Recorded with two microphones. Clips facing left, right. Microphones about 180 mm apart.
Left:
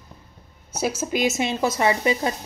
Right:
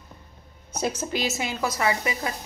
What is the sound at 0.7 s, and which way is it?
Speech, 5° left (ahead or behind).